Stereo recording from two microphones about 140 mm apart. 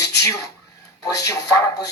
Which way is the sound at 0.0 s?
20° left (ahead or behind).